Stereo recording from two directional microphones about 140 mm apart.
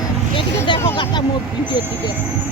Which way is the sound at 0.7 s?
35° left (ahead or behind).